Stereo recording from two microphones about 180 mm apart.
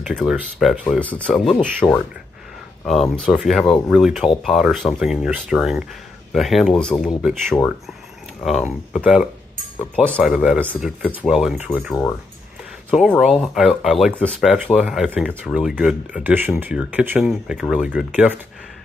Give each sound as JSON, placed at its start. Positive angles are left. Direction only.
{"t": 0.0, "sound": "speech", "side_deg": 0}
{"t": 11.9, "sound": "speech", "side_deg": 15}
{"t": 12.9, "sound": "speech", "side_deg": -5}